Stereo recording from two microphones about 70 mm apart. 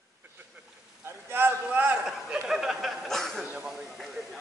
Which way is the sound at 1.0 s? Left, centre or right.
Right.